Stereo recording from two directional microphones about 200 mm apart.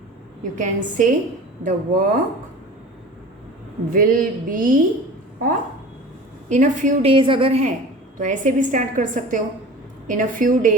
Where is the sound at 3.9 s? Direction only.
45° right (ahead or behind).